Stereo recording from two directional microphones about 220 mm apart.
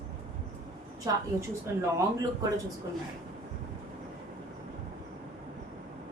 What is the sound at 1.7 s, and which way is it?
Speech, 10° right (ahead or behind).